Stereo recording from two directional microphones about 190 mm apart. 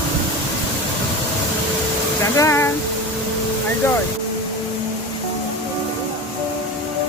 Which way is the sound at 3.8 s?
15° left (ahead or behind).